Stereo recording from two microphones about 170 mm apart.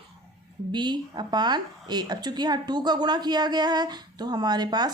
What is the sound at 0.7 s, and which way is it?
Speech, 25° right (ahead or behind).